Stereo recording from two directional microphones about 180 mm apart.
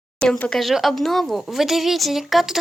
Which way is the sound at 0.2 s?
5° left (ahead or behind).